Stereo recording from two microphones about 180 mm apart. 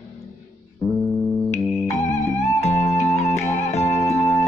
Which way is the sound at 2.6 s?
35° left (ahead or behind).